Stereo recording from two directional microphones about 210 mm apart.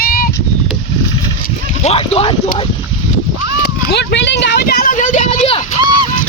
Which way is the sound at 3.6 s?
50° left (ahead or behind).